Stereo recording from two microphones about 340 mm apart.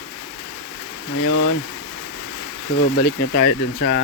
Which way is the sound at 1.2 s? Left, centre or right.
Left.